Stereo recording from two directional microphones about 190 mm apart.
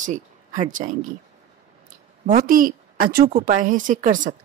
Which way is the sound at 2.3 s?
45° right (ahead or behind).